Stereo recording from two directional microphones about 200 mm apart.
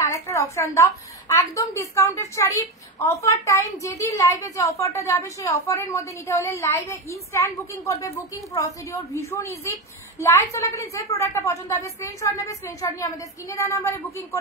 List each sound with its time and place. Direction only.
0.0 s a woman's voice: 15° left (ahead or behind)